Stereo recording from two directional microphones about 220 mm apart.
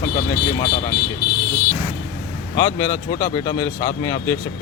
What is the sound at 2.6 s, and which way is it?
A man's voice, 15° left (ahead or behind).